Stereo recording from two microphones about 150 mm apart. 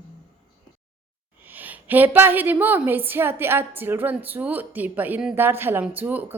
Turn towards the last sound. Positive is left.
turn(degrees=-10)  # may be behind; listen again after turning